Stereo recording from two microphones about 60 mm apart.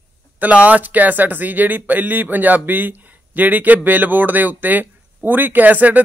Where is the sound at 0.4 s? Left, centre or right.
Right.